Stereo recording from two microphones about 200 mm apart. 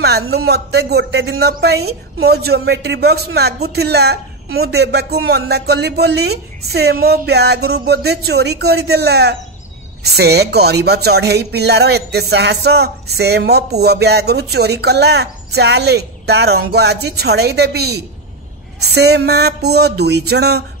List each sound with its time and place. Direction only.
0.0 s a man's voice: 55° right (ahead or behind)